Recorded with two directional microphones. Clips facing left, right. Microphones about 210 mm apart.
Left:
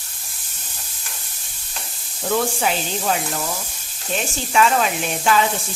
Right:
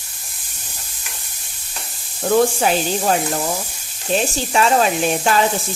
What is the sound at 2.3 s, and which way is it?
Speech, 45° right (ahead or behind).